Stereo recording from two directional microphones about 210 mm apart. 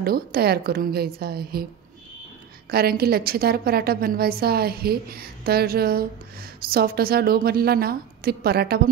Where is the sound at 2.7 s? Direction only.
45° right (ahead or behind).